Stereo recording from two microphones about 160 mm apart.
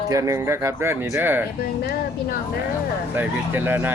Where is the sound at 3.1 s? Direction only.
10° right (ahead or behind).